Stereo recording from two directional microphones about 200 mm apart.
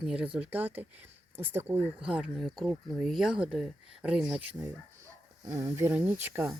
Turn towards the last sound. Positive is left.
turn(degrees=-10)  # may be behind; listen again after turning